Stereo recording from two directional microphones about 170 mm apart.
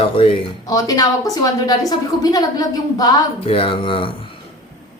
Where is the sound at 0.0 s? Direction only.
35° left (ahead or behind).